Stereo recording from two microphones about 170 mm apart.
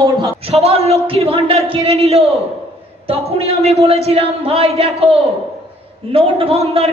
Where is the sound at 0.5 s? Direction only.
35° right (ahead or behind).